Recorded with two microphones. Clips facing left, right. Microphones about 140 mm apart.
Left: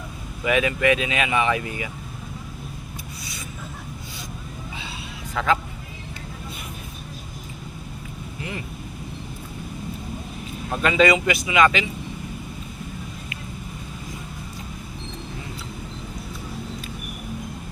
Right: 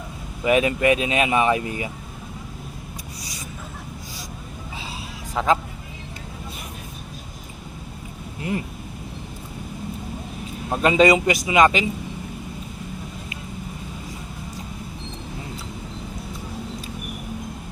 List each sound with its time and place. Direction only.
0.4 s speech: 35° right (ahead or behind)
5.3 s a man's voice: 35° right (ahead or behind)
10.7 s speech: 35° right (ahead or behind)